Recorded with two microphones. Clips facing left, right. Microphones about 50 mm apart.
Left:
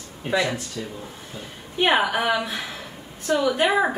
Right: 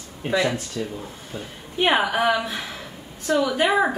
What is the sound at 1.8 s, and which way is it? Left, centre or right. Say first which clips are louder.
A woman's voice: even; centre.